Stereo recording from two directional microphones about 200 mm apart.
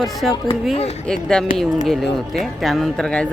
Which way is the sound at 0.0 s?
Centre (ahead or behind).